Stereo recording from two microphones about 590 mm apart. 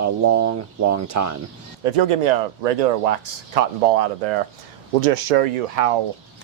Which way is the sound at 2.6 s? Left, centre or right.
Right.